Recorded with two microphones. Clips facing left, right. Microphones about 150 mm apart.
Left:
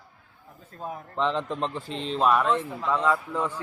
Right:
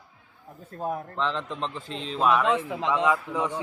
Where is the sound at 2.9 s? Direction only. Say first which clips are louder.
Even; 15° right (ahead or behind).